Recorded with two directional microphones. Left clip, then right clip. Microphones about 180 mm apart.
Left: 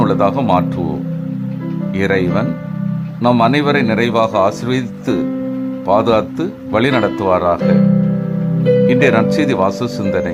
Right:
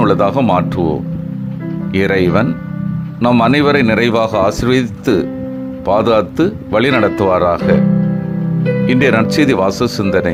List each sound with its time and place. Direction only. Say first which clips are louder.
0.0 s a man's voice: right 2 dB; 20° right (ahead or behind)
8.9 s a man's voice: even; 20° right (ahead or behind)